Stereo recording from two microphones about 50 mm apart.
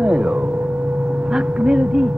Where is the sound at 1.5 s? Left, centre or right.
Centre.